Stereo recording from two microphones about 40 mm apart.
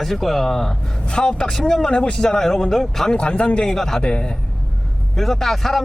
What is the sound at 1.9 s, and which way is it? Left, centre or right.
Speech, left.